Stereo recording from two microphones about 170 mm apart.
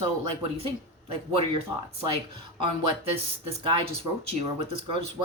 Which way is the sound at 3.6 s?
30° right (ahead or behind).